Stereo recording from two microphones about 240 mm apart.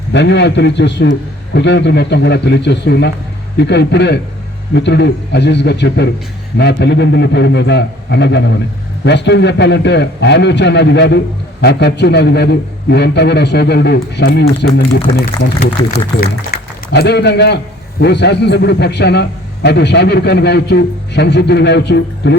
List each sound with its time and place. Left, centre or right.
0.1 s a man's voice: left
15.8 s speech: centre
16.5 s a sound: left
16.9 s a man's voice: left